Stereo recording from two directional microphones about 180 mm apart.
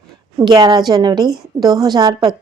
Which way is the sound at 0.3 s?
20° right (ahead or behind).